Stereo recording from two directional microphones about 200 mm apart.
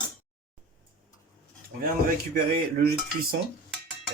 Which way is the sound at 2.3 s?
50° right (ahead or behind).